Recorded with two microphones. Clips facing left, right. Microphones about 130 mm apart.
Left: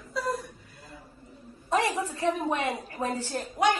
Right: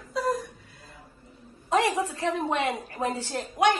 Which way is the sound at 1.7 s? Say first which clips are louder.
Right 2 dB; 80° right.